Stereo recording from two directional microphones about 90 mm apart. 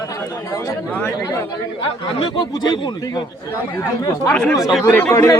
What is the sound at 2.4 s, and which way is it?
Speech, 60° left (ahead or behind).